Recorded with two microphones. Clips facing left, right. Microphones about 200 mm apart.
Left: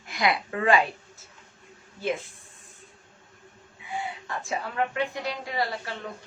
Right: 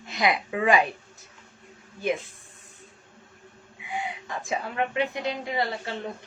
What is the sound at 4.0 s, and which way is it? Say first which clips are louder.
A woman's voice: even; 20° right (ahead or behind).